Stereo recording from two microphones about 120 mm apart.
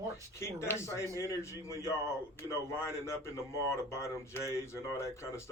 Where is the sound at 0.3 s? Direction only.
20° left (ahead or behind).